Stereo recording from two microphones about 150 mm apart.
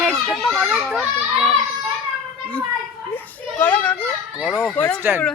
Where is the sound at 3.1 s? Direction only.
10° left (ahead or behind).